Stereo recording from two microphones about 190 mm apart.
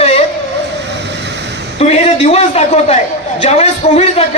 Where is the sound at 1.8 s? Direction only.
35° left (ahead or behind).